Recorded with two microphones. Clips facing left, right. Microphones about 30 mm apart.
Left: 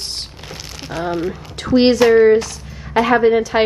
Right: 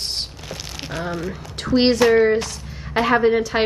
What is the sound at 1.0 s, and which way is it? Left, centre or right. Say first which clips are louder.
Speech: left 7 dB; left.